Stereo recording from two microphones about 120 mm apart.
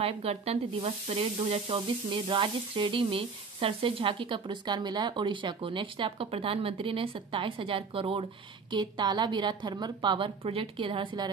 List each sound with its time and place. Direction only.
0.0 s sizzle: 55° right (ahead or behind); by 11.3 s 40° right (ahead or behind)